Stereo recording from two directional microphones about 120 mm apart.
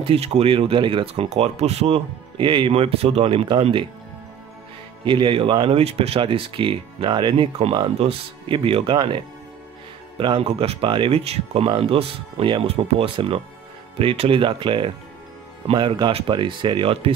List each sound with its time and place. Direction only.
0.0 s speech: 55° right (ahead or behind)
5.0 s speech: 40° right (ahead or behind)
14.4 s speech: 45° right (ahead or behind)